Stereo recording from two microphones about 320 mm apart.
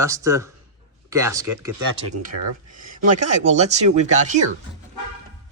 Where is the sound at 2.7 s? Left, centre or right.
Right.